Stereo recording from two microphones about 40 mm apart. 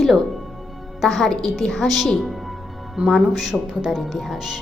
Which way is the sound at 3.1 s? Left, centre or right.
Centre.